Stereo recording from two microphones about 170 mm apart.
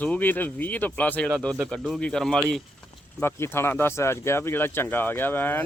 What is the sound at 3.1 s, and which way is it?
Speech, 15° left (ahead or behind).